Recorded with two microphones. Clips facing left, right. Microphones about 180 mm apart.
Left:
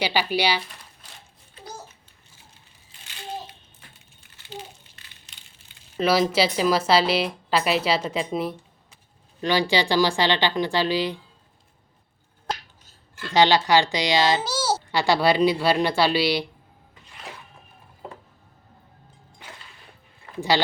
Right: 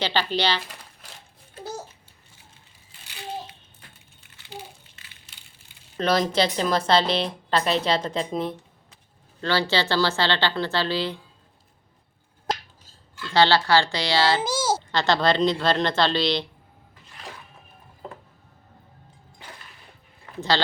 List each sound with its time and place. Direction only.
0.0 s speech: 10° left (ahead or behind)
6.0 s speech: 5° left (ahead or behind)
13.3 s speech: 15° left (ahead or behind)